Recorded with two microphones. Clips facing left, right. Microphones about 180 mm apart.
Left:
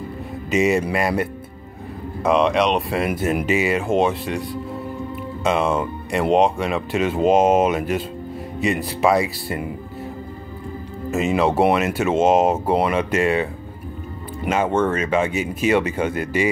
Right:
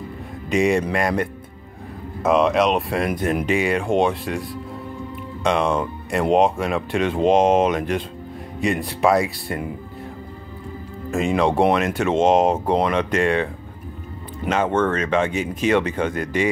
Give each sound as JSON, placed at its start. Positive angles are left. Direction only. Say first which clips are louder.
{"t": 0.5, "sound": "speech", "louder": "even", "side_deg": 5}
{"t": 11.1, "sound": "speech", "louder": "even", "side_deg": 5}